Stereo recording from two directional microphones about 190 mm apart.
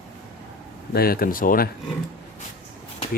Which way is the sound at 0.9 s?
50° left (ahead or behind).